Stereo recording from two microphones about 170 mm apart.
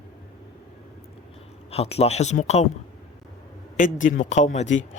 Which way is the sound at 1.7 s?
35° left (ahead or behind).